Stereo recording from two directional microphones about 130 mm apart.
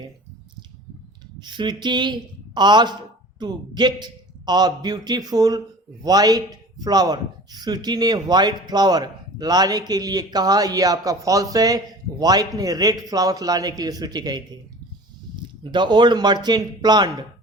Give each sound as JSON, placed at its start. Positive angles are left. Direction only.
{"t": 1.4, "sound": "a man's voice", "side_deg": -35}
{"t": 15.6, "sound": "a man's voice", "side_deg": -35}